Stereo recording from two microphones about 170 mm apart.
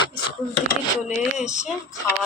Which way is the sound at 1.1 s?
45° left (ahead or behind).